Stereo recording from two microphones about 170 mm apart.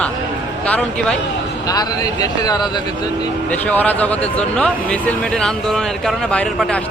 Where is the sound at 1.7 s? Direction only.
20° left (ahead or behind).